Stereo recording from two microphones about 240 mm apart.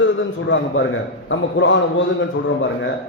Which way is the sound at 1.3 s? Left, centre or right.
Left.